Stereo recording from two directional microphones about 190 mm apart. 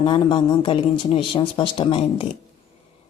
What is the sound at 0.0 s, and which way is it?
Speech, 25° left (ahead or behind).